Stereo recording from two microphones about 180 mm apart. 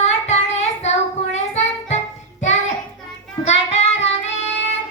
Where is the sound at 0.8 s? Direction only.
40° left (ahead or behind).